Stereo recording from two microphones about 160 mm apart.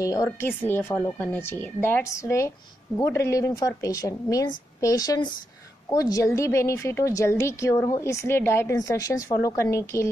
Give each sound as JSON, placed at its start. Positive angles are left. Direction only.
{"t": 0.0, "sound": "a woman's voice", "side_deg": 20}